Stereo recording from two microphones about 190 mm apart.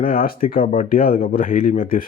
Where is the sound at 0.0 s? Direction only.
50° left (ahead or behind).